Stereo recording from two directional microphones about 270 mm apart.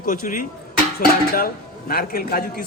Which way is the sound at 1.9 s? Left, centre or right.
Left.